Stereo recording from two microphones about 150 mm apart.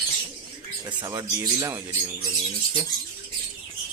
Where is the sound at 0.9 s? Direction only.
30° right (ahead or behind).